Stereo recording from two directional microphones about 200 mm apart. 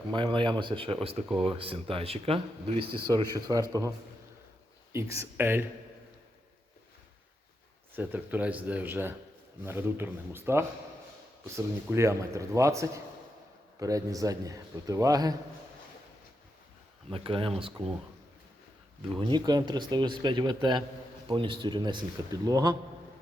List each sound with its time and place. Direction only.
0.1 s a man's voice: 25° right (ahead or behind)
7.9 s a man's voice: 10° right (ahead or behind)
17.1 s speech: 25° right (ahead or behind)
19.2 s speech: 20° right (ahead or behind)